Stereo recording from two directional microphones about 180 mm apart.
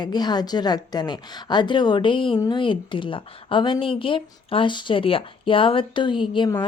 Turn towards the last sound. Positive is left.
turn(degrees=25)  # may be behind; listen again after turning